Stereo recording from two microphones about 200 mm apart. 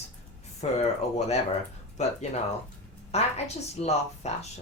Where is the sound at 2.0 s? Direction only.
35° left (ahead or behind).